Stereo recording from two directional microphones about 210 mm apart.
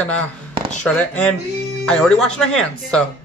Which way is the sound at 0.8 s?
5° left (ahead or behind).